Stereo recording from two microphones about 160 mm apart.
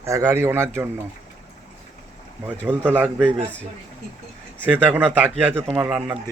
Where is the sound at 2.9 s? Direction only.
10° right (ahead or behind).